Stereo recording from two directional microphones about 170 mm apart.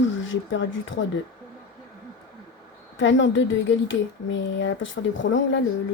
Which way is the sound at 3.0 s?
90° left.